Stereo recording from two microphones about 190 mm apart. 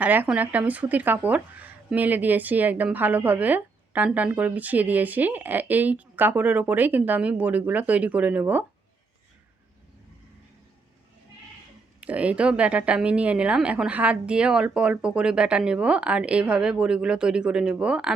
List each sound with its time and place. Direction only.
0.0 s speech: 10° right (ahead or behind)
11.9 s a woman's voice: 5° right (ahead or behind)